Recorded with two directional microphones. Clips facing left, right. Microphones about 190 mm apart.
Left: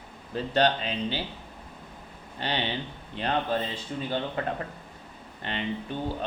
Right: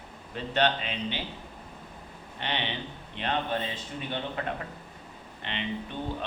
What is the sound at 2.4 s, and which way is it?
Speech, 35° left (ahead or behind).